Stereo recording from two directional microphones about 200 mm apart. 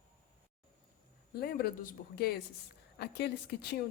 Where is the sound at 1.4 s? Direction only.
50° left (ahead or behind).